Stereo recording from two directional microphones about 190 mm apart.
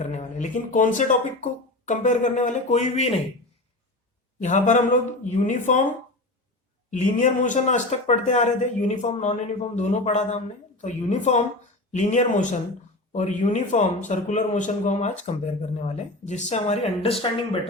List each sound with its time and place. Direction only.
0.0 s speech: 40° left (ahead or behind)
4.4 s speech: 40° left (ahead or behind)
6.9 s speech: 40° left (ahead or behind)